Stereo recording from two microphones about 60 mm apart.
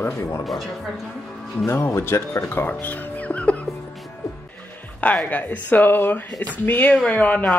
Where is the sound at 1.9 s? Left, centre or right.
Left.